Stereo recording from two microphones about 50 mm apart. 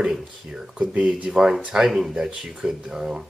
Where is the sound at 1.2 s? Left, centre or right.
Centre.